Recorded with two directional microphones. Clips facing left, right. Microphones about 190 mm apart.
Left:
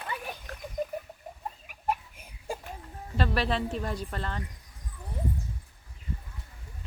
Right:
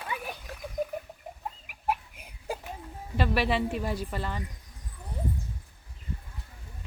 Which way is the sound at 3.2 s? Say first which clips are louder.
Right 2 dB; 5° right (ahead or behind).